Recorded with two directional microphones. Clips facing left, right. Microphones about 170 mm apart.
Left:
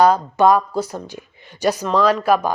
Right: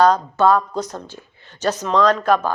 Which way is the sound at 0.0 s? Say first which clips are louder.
Left 1 dB; 15° left (ahead or behind).